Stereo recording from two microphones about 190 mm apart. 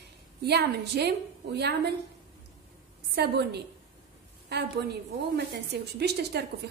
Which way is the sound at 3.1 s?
60° right (ahead or behind).